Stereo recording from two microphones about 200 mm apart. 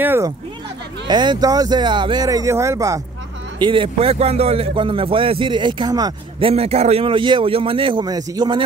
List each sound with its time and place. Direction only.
0.0 s speech: 10° right (ahead or behind)
1.0 s speech: 20° right (ahead or behind)
6.5 s speech: 30° right (ahead or behind)